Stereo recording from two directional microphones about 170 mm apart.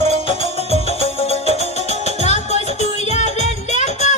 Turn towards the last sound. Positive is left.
turn(degrees=40)  # may be behind; listen again after turning